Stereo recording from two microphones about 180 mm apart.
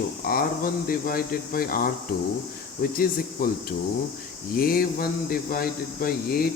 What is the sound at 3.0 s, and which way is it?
Speech, 55° left (ahead or behind).